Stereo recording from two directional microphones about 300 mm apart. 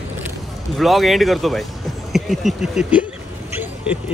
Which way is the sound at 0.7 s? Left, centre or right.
Centre.